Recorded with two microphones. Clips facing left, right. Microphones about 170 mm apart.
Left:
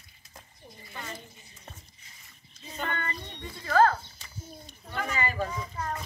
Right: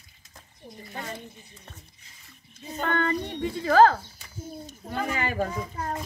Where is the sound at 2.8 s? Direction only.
70° right (ahead or behind).